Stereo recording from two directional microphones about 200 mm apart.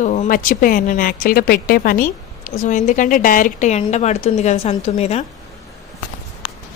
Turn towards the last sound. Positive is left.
turn(degrees=30)  # may be behind; listen again after turning